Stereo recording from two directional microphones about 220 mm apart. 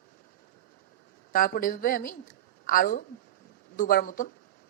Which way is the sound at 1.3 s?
40° left (ahead or behind).